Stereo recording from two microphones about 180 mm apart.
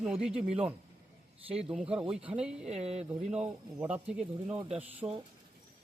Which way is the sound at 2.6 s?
35° right (ahead or behind).